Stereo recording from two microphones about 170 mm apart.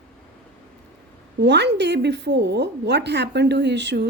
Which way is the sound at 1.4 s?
90° right.